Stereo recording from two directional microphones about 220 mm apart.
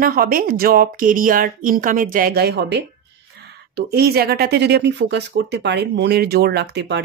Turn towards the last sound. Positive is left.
turn(degrees=-50)  # may be behind; listen again after turning